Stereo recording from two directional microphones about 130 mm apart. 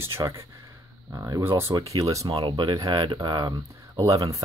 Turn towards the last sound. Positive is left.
turn(degrees=-25)  # may be behind; listen again after turning